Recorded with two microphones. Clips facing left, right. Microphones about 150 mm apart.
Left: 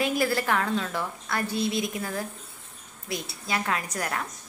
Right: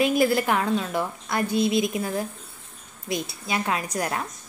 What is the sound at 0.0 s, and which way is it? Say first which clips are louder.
A woman's voice: right 5 dB; 15° right (ahead or behind).